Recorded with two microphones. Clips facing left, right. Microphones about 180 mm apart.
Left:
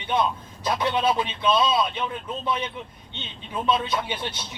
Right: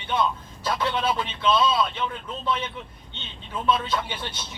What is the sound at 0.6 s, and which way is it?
A man's voice, 15° left (ahead or behind).